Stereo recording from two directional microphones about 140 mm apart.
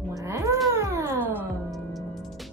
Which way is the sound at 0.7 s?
20° right (ahead or behind).